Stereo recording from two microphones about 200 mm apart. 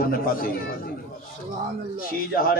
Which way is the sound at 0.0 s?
45° left (ahead or behind).